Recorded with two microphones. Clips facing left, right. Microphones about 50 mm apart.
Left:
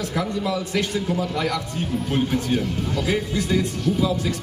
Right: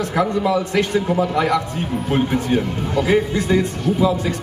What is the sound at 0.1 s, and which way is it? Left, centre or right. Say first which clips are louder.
A man's voice: right 8 dB; right.